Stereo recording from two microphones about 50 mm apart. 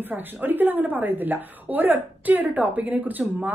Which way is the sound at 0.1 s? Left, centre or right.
Right.